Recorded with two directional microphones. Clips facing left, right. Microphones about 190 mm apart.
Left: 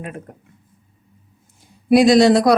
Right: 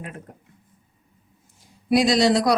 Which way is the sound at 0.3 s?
60° left (ahead or behind).